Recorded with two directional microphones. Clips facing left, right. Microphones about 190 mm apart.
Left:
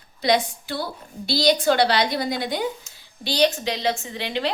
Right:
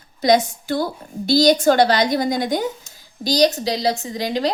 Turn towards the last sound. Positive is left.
turn(degrees=-40)  # may be behind; listen again after turning